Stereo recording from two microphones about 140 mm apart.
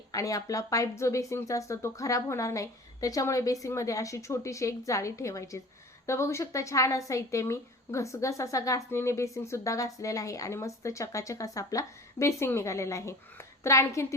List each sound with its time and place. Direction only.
0.1 s a woman's voice: 25° left (ahead or behind)